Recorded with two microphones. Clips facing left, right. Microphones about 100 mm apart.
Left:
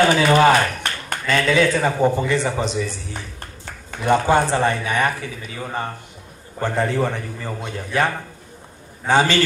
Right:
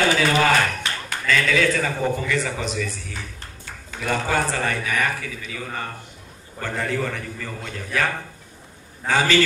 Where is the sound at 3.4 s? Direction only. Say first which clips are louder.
Left 3 dB; 50° left (ahead or behind).